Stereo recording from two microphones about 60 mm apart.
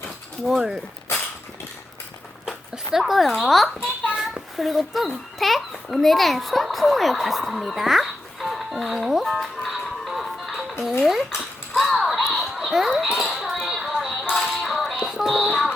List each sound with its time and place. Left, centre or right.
0.4 s speech: centre
2.5 s a child's voice: centre
4.0 s a sound: centre
4.5 s a child's voice: centre
11.8 s a sound: centre
14.3 s music: centre